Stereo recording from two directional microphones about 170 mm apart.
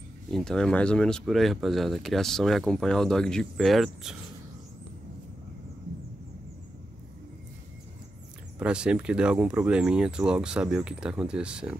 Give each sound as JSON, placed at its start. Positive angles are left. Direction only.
{"t": 0.3, "sound": "speech", "side_deg": 5}
{"t": 8.5, "sound": "speech", "side_deg": -5}